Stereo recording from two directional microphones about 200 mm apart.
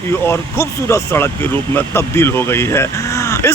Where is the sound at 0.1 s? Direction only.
10° left (ahead or behind).